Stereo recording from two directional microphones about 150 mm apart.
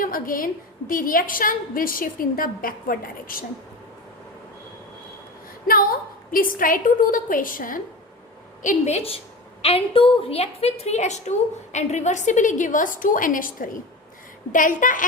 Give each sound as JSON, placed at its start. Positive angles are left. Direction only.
{"t": 0.0, "sound": "a woman's voice", "side_deg": 70}
{"t": 5.6, "sound": "a woman's voice", "side_deg": 75}
{"t": 8.6, "sound": "a woman's voice", "side_deg": 50}